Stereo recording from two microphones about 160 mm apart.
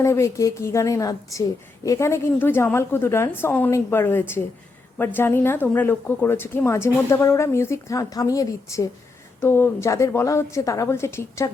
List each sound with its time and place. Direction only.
0.0 s a woman's voice: 20° left (ahead or behind)